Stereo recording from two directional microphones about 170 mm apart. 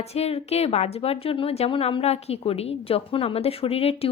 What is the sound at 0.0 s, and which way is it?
A woman's voice, 40° left (ahead or behind).